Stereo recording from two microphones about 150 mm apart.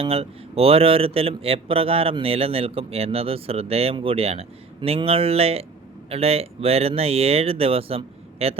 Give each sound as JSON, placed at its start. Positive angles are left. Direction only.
{"t": 0.0, "sound": "speech", "side_deg": -40}